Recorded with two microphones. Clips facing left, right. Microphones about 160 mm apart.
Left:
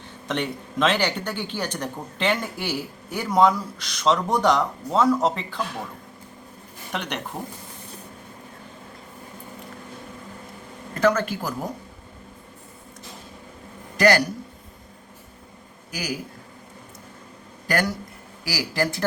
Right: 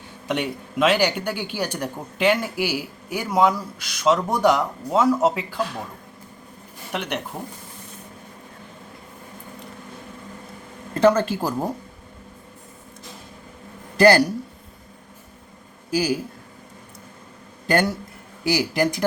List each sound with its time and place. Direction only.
0.3 s speech: 10° right (ahead or behind)
6.9 s speech: 5° right (ahead or behind)
10.9 s speech: 30° right (ahead or behind)
13.9 s a sound: 30° right (ahead or behind)
15.9 s speech: 30° right (ahead or behind)
17.7 s speech: 25° right (ahead or behind)